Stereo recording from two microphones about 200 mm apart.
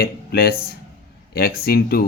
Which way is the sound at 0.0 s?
50° left (ahead or behind).